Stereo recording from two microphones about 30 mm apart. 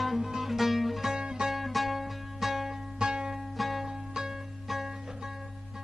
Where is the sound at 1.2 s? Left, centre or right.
Right.